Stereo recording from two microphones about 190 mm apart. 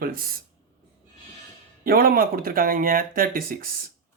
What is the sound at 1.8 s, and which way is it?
Speech, 50° right (ahead or behind).